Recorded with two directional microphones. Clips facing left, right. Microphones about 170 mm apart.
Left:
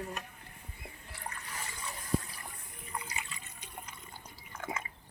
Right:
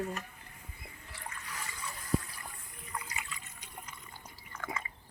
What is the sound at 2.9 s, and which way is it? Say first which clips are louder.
Water: even; 25° left (ahead or behind).